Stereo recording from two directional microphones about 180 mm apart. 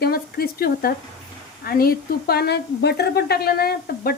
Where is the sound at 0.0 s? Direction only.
60° left (ahead or behind).